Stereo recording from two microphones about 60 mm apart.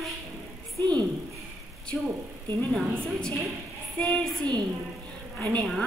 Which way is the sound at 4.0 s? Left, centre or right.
Centre.